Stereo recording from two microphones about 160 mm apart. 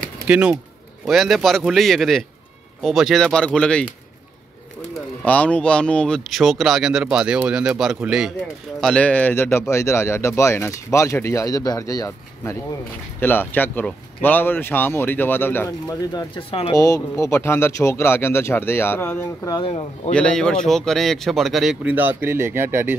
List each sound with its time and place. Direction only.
0.3 s speech: 5° right (ahead or behind)
5.2 s speech: 10° left (ahead or behind)
8.8 s speech: 5° left (ahead or behind)
16.1 s speech: 30° left (ahead or behind)
16.7 s speech: 20° left (ahead or behind)
19.6 s speech: 35° left (ahead or behind)
20.1 s speech: 5° left (ahead or behind); by 22.9 s 15° right (ahead or behind)